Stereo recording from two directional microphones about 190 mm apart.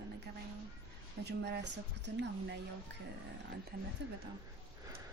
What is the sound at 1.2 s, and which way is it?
Speech, 55° right (ahead or behind).